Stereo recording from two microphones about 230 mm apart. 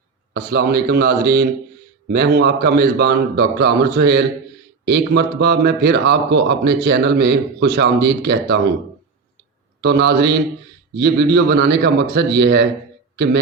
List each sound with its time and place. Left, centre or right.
0.3 s a man's voice: right
9.8 s a man's voice: right